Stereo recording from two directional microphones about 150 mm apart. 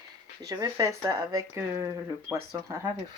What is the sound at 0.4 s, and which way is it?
Speech, 25° right (ahead or behind).